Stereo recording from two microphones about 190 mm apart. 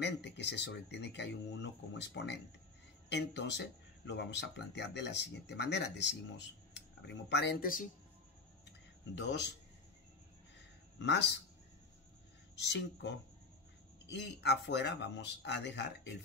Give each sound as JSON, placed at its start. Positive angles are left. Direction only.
{"t": 0.0, "sound": "speech", "side_deg": 65}
{"t": 9.1, "sound": "speech", "side_deg": 65}
{"t": 11.0, "sound": "speech", "side_deg": 65}
{"t": 12.5, "sound": "speech", "side_deg": 65}